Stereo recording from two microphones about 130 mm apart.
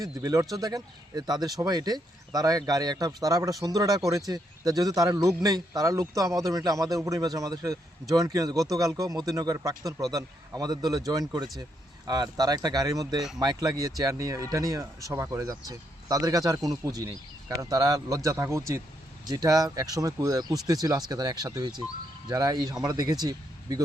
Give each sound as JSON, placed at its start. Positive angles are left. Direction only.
{"t": 0.5, "sound": "speech", "side_deg": -30}